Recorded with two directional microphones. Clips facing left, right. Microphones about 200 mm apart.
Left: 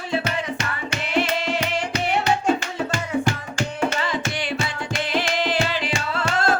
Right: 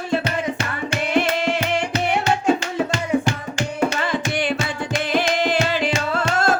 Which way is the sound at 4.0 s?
50° right (ahead or behind).